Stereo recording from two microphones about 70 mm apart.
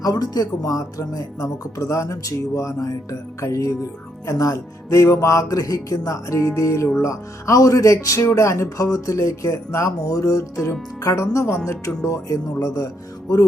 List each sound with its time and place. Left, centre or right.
0.0 s speech: left
12.5 s music: left